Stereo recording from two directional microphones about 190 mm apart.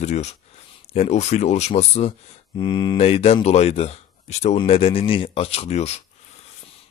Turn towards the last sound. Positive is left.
turn(degrees=35)  # may be behind; listen again after turning